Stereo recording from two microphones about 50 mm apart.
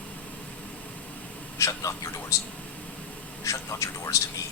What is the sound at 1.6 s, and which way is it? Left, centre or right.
Speech, left.